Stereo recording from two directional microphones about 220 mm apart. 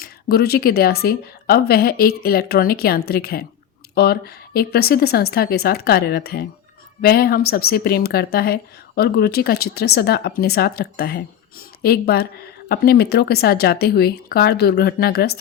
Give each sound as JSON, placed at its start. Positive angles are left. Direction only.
{"t": 0.0, "sound": "a woman's voice", "side_deg": 45}